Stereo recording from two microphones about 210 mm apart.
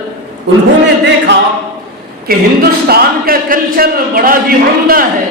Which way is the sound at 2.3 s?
45° right (ahead or behind).